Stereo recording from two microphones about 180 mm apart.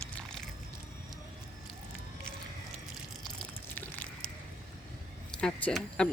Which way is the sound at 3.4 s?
5° left (ahead or behind).